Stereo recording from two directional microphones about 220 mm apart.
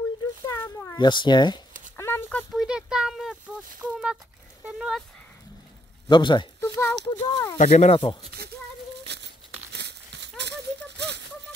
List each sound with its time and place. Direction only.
0.5 s cat: 10° left (ahead or behind)
2.0 s a sound: 10° left (ahead or behind)
3.8 s speech: 5° right (ahead or behind)
6.0 s speech: 20° left (ahead or behind)
7.5 s speech: 30° left (ahead or behind)
9.0 s crumpling: 50° right (ahead or behind)